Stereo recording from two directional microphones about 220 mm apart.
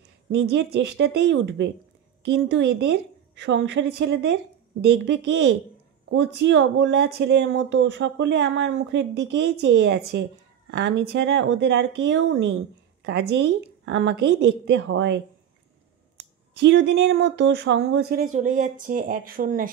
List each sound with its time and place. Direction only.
0.3 s speech: 55° right (ahead or behind)
16.5 s speech: 55° right (ahead or behind)